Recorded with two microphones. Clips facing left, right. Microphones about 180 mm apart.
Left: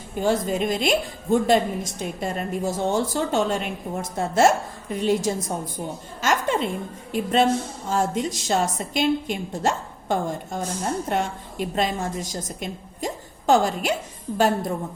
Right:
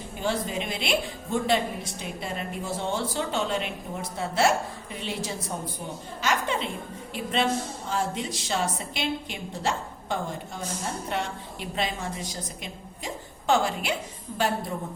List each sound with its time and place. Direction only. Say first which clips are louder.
0.2 s a woman's voice: left 7 dB; 45° left (ahead or behind)
6.2 s chuckle: left 5 dB; 45° left (ahead or behind)
7.1 s a woman's voice: left 6 dB; 45° left (ahead or behind)